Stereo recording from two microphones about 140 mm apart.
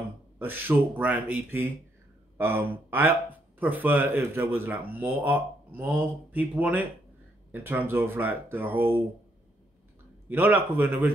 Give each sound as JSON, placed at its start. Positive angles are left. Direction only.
{"t": 0.4, "sound": "speech", "side_deg": -15}
{"t": 10.2, "sound": "speech", "side_deg": -15}